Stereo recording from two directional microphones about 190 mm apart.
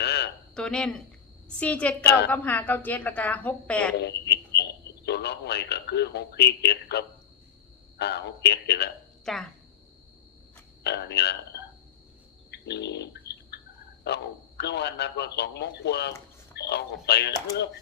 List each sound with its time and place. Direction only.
0.0 s a sound: 60° left (ahead or behind)
0.5 s a woman's voice: 5° left (ahead or behind)
3.9 s a woman's voice: 60° left (ahead or behind)
9.2 s speech: centre (ahead or behind)
10.8 s speech: 60° left (ahead or behind)
12.5 s a sound: 60° left (ahead or behind)
14.6 s speech: 60° left (ahead or behind)